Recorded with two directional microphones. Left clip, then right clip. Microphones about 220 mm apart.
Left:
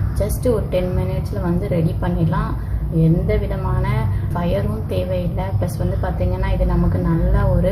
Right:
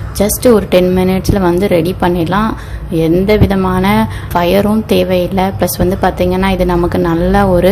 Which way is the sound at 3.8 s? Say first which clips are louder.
Right 13 dB; 50° right (ahead or behind).